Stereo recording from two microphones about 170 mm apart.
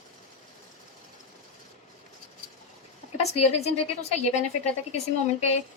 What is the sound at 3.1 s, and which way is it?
A woman's voice, 40° left (ahead or behind).